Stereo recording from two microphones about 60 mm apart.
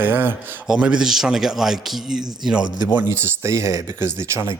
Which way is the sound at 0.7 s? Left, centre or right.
Centre.